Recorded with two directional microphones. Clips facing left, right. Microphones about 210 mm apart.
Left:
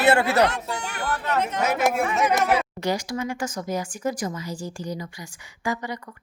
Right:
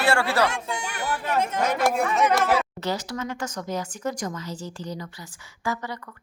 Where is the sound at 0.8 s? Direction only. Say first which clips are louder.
Left 1 dB; 10° right (ahead or behind).